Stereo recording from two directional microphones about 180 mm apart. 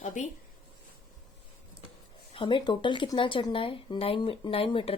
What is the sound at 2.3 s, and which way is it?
A woman's voice, 25° left (ahead or behind).